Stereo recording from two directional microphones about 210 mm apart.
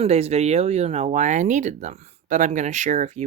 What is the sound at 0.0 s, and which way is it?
Speech, 30° right (ahead or behind).